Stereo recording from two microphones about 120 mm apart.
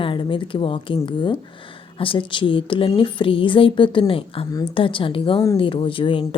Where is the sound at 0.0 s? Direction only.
45° left (ahead or behind).